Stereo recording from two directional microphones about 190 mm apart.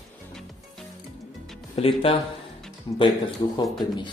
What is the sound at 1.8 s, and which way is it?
Speech, 30° left (ahead or behind).